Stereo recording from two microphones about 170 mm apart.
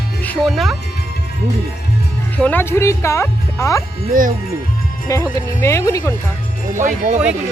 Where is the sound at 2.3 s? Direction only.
10° left (ahead or behind).